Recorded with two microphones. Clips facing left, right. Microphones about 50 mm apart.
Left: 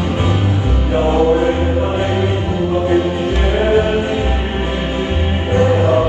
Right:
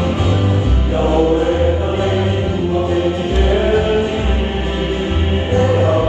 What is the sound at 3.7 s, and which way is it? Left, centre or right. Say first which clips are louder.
Music: left 1 dB; left.